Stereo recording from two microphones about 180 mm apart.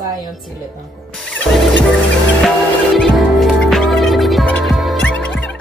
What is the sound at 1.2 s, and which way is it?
Music, 5° left (ahead or behind).